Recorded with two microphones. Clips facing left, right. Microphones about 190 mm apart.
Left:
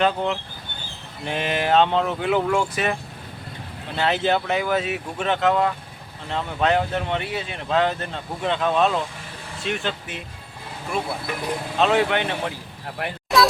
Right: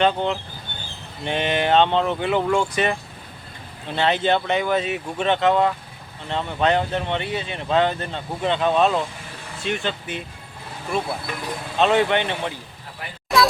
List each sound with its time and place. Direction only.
0.0 s speech: 5° left (ahead or behind)
3.9 s speech: 5° left (ahead or behind)
13.0 s speech: 65° left (ahead or behind)